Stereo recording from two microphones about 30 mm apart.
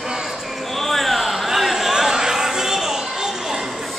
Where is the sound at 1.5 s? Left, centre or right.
Centre.